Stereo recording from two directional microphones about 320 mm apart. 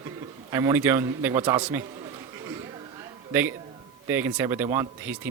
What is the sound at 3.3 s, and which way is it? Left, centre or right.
A man's voice, centre.